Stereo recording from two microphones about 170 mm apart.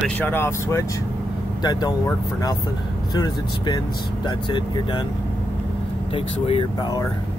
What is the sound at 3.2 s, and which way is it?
Speech, 25° left (ahead or behind).